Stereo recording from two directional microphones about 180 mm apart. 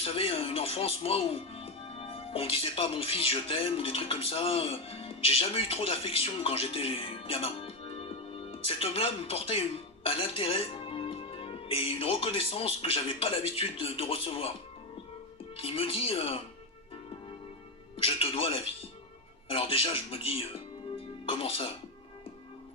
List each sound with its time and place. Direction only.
0.0 s speech: 35° left (ahead or behind)
15.5 s speech: 30° left (ahead or behind)
17.9 s speech: 35° left (ahead or behind)
20.9 s music: 30° left (ahead or behind)